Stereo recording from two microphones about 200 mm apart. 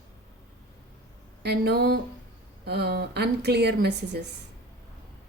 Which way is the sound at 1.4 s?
55° right (ahead or behind).